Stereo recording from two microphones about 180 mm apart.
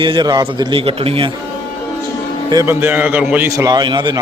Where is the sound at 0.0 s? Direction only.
25° right (ahead or behind).